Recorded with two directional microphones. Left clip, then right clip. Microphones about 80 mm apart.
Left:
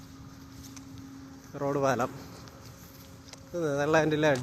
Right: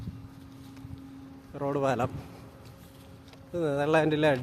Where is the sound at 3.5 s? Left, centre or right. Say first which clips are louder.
Even; right.